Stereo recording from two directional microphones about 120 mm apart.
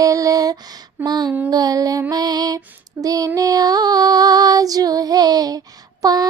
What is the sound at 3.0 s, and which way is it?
Female singing, 30° right (ahead or behind).